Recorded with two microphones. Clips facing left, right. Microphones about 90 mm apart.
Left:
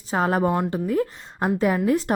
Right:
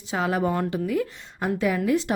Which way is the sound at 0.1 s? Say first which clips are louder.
Left 3 dB; 40° left (ahead or behind).